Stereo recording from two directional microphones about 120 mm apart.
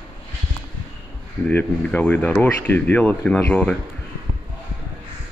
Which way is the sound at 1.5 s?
15° left (ahead or behind).